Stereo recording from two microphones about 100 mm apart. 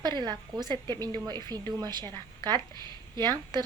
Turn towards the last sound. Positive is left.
turn(degrees=-45)  # may be behind; listen again after turning